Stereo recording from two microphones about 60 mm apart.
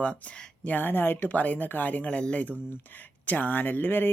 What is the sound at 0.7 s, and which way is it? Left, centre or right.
Speech, left.